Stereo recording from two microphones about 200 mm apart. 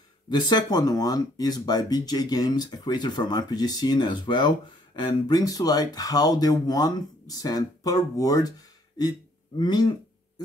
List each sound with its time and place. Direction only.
0.3 s speech: 20° left (ahead or behind)